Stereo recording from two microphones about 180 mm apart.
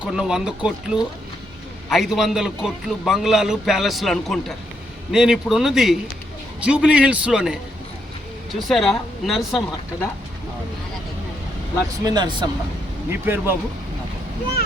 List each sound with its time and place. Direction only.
0.0 s a man's voice: 5° right (ahead or behind)
8.6 s a man's voice: centre (ahead or behind)
12.0 s speech: 25° right (ahead or behind)
13.1 s a man's voice: 15° right (ahead or behind)